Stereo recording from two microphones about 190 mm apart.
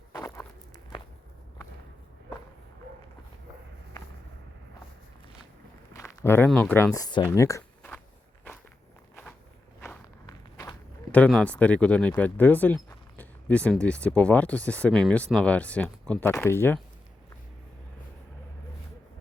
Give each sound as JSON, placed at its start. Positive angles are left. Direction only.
{"t": 0.1, "sound": "walk", "side_deg": 15}
{"t": 5.9, "sound": "speech", "side_deg": 15}
{"t": 7.8, "sound": "biting", "side_deg": 10}
{"t": 9.8, "sound": "walk", "side_deg": 15}
{"t": 11.1, "sound": "speech", "side_deg": 5}